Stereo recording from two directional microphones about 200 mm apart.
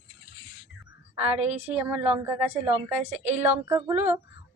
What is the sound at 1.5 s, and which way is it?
A woman's voice, 5° right (ahead or behind).